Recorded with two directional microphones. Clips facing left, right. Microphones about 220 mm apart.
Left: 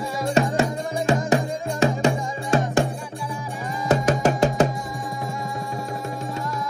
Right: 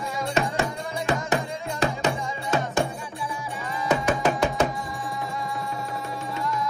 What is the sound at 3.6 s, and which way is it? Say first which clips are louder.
Music: left 3 dB; 45° left (ahead or behind).